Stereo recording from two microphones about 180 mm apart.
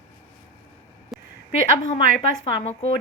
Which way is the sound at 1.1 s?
Centre (ahead or behind).